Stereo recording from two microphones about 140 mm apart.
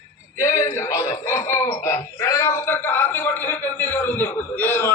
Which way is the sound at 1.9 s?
20° left (ahead or behind).